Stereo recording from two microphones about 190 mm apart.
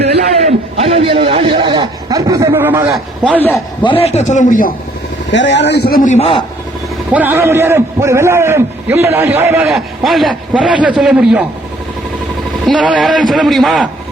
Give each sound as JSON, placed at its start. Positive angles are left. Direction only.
{"t": 0.4, "sound": "a man's voice", "side_deg": -35}
{"t": 2.9, "sound": "a man's voice", "side_deg": 5}
{"t": 3.8, "sound": "a man's voice", "side_deg": 30}
{"t": 5.3, "sound": "a man's voice", "side_deg": 70}
{"t": 7.1, "sound": "a man's voice", "side_deg": -10}
{"t": 9.7, "sound": "a man's voice", "side_deg": 0}
{"t": 12.6, "sound": "a man's voice", "side_deg": 0}